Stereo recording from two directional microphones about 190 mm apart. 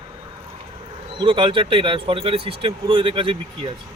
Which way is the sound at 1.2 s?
25° right (ahead or behind).